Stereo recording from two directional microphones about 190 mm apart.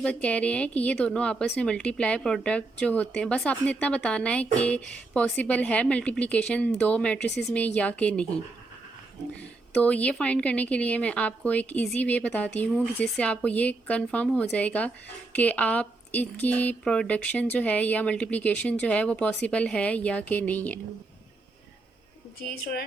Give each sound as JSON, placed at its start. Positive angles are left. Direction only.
{"t": 0.0, "sound": "a woman's voice", "side_deg": 5}
{"t": 9.7, "sound": "a woman's voice", "side_deg": 5}